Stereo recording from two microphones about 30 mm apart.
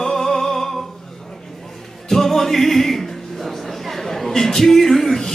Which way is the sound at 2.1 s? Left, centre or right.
Centre.